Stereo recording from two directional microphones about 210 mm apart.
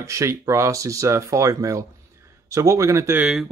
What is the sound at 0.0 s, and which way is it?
Speech, 15° right (ahead or behind).